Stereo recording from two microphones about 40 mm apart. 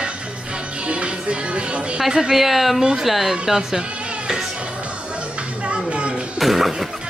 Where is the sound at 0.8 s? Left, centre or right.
Right.